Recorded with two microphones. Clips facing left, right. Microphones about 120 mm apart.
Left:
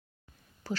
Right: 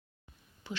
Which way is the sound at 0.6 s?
40° left (ahead or behind).